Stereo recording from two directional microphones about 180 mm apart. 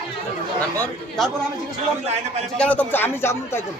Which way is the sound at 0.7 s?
5° left (ahead or behind).